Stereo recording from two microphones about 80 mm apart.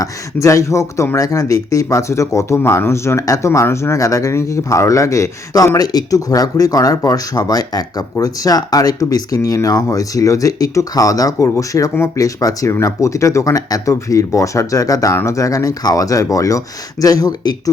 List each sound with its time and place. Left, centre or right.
0.0 s speech: left